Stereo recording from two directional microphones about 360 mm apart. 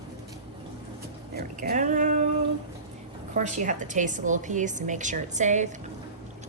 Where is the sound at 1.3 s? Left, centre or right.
Right.